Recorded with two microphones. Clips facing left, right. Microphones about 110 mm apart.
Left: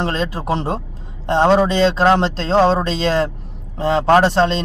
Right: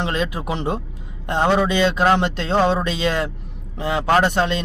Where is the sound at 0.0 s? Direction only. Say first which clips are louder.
Left 2 dB; 35° left (ahead or behind).